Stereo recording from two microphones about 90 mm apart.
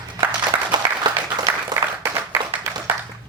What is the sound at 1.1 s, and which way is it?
Applause, 55° right (ahead or behind).